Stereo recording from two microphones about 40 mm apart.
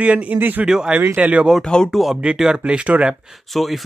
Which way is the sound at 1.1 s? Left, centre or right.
Right.